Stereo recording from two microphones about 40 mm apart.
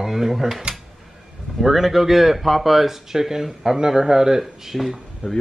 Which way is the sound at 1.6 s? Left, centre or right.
Centre.